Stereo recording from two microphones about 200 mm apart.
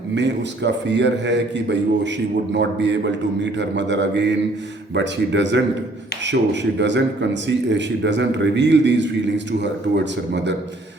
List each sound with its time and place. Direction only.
0.1 s a man's voice: 60° right (ahead or behind)